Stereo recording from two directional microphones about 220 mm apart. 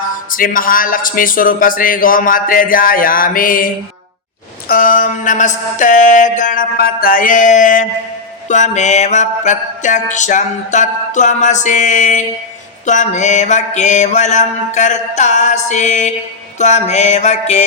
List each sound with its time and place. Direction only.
0.3 s mantra: 40° left (ahead or behind)
4.7 s mantra: 40° left (ahead or behind)